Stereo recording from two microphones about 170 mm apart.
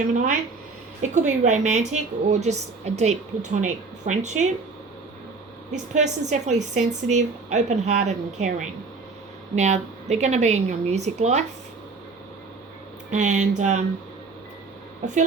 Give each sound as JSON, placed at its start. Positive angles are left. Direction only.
{"t": 1.1, "sound": "a woman's voice", "side_deg": -45}
{"t": 5.7, "sound": "a woman's voice", "side_deg": -45}
{"t": 13.1, "sound": "a woman's voice", "side_deg": -45}